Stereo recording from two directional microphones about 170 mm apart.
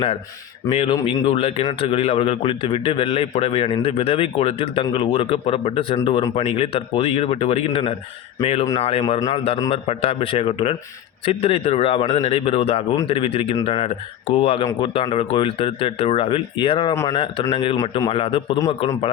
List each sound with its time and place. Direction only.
0.7 s a man's voice: 35° left (ahead or behind)
16.9 s speech: 15° left (ahead or behind)
17.5 s a man's voice: 35° left (ahead or behind)
17.7 s a man's voice: 20° left (ahead or behind)
18.1 s a man's voice: 30° left (ahead or behind)